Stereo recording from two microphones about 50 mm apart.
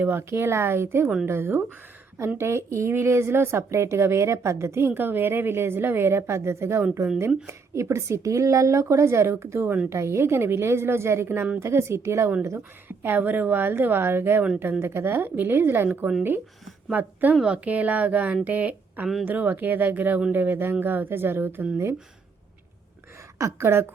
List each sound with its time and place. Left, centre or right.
0.0 s a woman's voice: right
2.4 s speech: right
4.9 s a woman's voice: right
12.9 s a woman's voice: right
17.4 s a woman's voice: right
23.4 s speech: right